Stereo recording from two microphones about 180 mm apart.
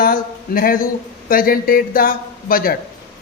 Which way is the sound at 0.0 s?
55° left (ahead or behind).